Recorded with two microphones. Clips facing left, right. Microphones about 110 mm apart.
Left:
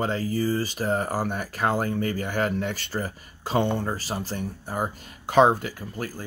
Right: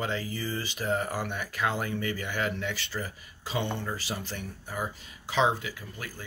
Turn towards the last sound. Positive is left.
turn(degrees=40)  # may be behind; listen again after turning